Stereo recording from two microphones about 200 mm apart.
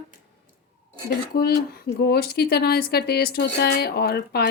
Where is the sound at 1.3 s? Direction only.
50° left (ahead or behind).